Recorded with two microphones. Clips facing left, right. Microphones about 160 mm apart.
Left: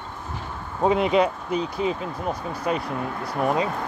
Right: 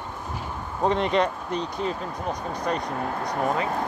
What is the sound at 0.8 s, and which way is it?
Speech, 5° left (ahead or behind).